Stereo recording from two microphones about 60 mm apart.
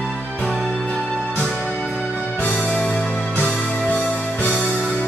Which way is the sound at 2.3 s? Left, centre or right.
Left.